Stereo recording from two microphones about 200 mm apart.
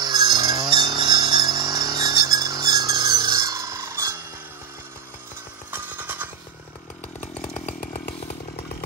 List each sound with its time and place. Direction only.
0.0 s a sound: 20° right (ahead or behind)
5.7 s music: 10° right (ahead or behind)
7.5 s chainsaw: 40° left (ahead or behind)